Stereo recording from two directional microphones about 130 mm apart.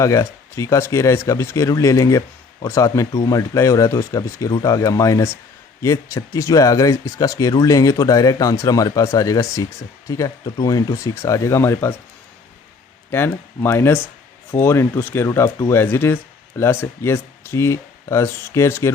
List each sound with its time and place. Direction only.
0.0 s speech: 25° left (ahead or behind)
13.1 s speech: 20° left (ahead or behind)